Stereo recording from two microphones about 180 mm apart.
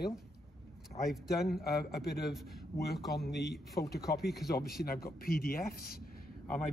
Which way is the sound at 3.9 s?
65° left (ahead or behind).